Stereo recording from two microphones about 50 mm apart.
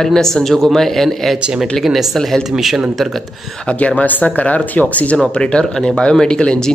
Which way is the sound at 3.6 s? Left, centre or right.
Left.